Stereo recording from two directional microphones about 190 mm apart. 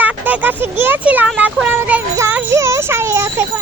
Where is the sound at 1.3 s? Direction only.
5° right (ahead or behind).